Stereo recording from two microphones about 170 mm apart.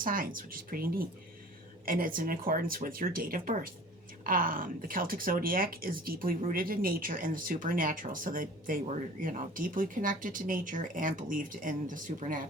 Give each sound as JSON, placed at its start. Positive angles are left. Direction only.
{"t": 0.0, "sound": "speech", "side_deg": -55}